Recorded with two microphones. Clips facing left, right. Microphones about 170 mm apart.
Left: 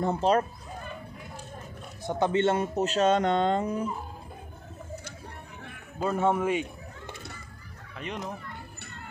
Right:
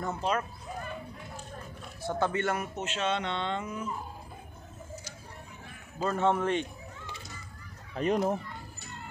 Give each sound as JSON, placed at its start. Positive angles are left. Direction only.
{"t": 0.0, "sound": "speech", "side_deg": 35}
{"t": 2.0, "sound": "speech", "side_deg": 20}
{"t": 6.0, "sound": "a man's voice", "side_deg": 10}
{"t": 7.9, "sound": "speech", "side_deg": -40}